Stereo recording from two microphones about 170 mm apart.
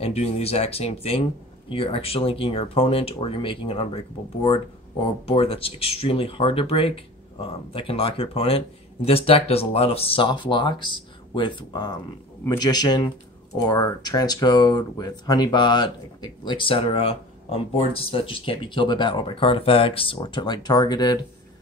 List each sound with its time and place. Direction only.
0.0 s speech: 35° left (ahead or behind)